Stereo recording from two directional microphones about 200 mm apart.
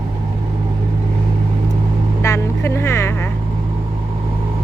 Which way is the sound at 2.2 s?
15° left (ahead or behind).